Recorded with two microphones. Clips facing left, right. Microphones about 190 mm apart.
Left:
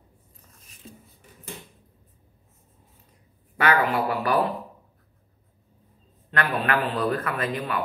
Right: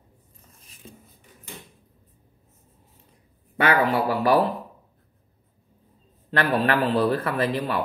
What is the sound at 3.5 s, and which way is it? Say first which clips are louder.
Speech: right 1 dB; 35° right (ahead or behind).